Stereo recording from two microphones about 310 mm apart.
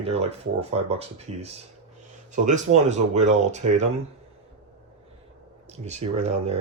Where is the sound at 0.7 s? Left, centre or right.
Centre.